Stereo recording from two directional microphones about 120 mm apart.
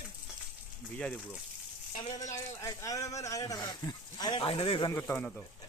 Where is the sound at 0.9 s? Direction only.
10° left (ahead or behind).